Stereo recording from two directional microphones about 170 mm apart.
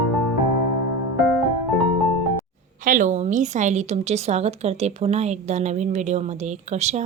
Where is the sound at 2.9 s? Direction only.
50° right (ahead or behind).